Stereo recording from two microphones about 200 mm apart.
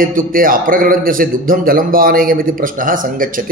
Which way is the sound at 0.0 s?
45° right (ahead or behind).